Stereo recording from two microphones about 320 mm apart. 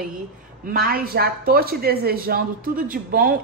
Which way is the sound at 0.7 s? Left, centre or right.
Right.